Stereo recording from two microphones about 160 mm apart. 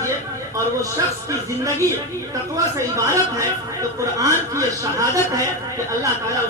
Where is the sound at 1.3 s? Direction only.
20° right (ahead or behind).